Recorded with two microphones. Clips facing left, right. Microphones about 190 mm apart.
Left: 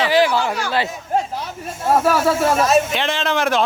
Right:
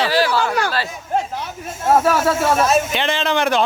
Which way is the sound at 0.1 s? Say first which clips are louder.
Left 2 dB; 20° left (ahead or behind).